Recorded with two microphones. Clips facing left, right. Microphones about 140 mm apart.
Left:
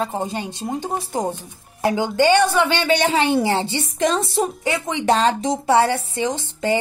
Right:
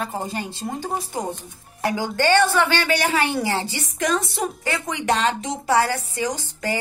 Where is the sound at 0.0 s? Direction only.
20° left (ahead or behind).